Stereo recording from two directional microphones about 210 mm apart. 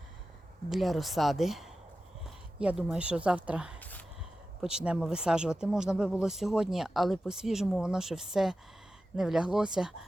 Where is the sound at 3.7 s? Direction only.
10° left (ahead or behind).